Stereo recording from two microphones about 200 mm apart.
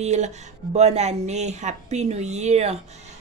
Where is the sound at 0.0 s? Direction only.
35° right (ahead or behind).